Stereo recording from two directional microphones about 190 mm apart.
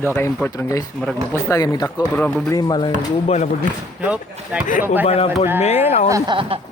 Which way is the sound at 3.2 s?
35° left (ahead or behind).